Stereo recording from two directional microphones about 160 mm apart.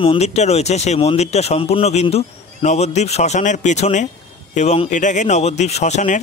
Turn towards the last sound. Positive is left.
turn(degrees=45)  # may be behind; listen again after turning